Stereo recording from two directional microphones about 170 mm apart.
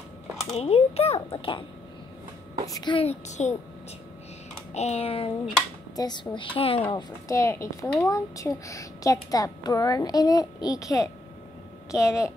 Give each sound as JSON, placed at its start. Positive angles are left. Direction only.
{"t": 0.6, "sound": "a child's voice", "side_deg": 35}
{"t": 2.6, "sound": "a child's voice", "side_deg": 25}
{"t": 4.7, "sound": "a child's voice", "side_deg": 40}
{"t": 5.9, "sound": "a woman's voice", "side_deg": 25}